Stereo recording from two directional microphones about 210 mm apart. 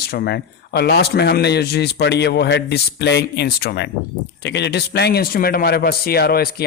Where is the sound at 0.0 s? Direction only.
45° left (ahead or behind).